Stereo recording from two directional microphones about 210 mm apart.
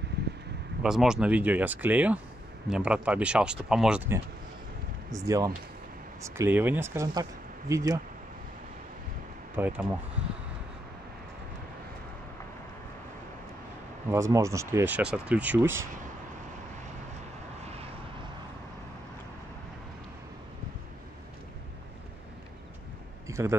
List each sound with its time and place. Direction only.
0.8 s speech: 5° right (ahead or behind)
9.6 s speech: 10° right (ahead or behind)
14.1 s speech: 15° right (ahead or behind)
23.2 s a sound: 15° right (ahead or behind)